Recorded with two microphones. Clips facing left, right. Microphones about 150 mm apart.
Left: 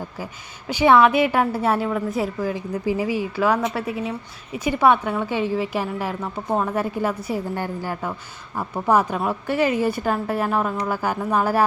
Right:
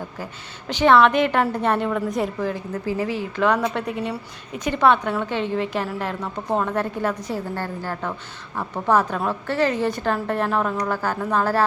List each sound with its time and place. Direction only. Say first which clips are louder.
0.7 s a woman's voice: even; 10° left (ahead or behind)